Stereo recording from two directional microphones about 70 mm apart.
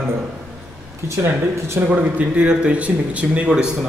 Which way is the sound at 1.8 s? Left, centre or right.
Right.